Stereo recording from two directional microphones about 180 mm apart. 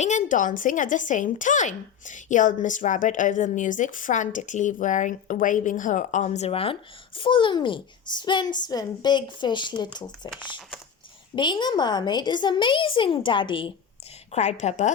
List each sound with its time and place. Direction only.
0.0 s a woman's voice: 40° left (ahead or behind); by 10.1 s 25° left (ahead or behind)
11.3 s a child's voice: 25° left (ahead or behind)
14.3 s a woman's voice: 40° left (ahead or behind)